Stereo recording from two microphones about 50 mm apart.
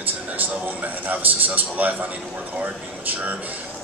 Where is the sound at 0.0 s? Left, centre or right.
Right.